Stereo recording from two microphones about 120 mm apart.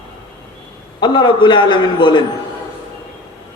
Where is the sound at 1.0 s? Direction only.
40° left (ahead or behind).